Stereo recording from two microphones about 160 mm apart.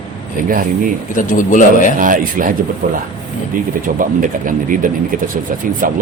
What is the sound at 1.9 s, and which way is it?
Speech, 60° right (ahead or behind).